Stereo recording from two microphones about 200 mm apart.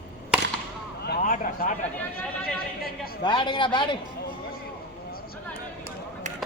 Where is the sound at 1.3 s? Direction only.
40° left (ahead or behind).